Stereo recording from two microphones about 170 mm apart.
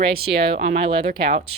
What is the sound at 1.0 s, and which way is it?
Speech, 55° right (ahead or behind).